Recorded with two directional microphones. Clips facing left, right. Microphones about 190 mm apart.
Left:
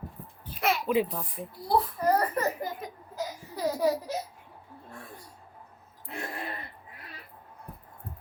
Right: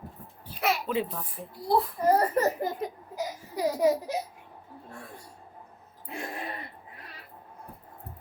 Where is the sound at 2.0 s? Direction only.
25° right (ahead or behind).